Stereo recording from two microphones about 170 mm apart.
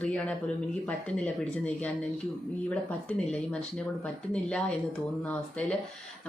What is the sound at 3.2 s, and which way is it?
Speech, 5° left (ahead or behind).